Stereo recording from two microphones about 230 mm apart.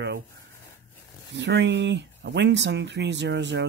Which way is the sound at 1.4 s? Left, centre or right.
Right.